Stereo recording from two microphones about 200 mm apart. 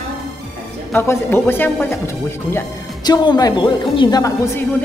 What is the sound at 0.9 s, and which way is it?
A man's voice, 10° left (ahead or behind).